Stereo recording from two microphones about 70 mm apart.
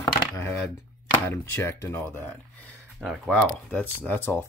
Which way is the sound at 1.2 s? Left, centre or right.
Left.